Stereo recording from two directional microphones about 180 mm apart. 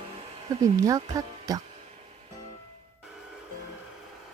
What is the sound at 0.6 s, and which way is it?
Speech, 20° right (ahead or behind).